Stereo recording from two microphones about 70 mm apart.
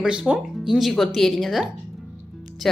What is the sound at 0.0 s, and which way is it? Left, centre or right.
Speech, centre.